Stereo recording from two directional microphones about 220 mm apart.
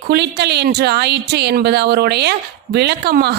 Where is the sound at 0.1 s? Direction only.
50° right (ahead or behind).